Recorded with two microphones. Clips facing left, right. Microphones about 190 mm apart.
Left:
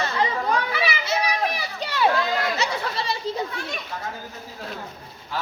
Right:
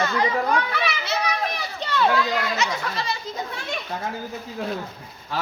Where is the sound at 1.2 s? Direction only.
10° left (ahead or behind).